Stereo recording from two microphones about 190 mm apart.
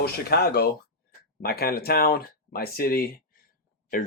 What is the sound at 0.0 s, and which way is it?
Speech, 55° left (ahead or behind).